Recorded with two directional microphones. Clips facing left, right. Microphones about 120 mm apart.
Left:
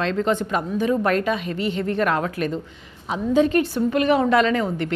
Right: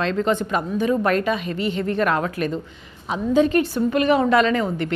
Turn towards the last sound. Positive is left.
turn(degrees=-20)  # may be behind; listen again after turning